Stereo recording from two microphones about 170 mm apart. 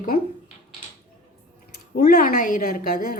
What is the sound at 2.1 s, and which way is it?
Speech, 60° left (ahead or behind).